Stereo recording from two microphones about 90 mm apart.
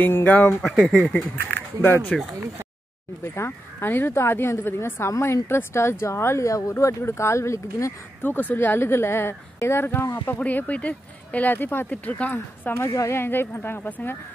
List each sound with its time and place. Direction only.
0.0 s speech: 20° left (ahead or behind)
0.6 s speech: centre (ahead or behind)
1.8 s speech: 25° left (ahead or behind)
3.3 s speech: 25° left (ahead or behind)
8.3 s speech: 20° left (ahead or behind)
10.4 s speech: 15° left (ahead or behind)
12.7 s speech: 35° left (ahead or behind)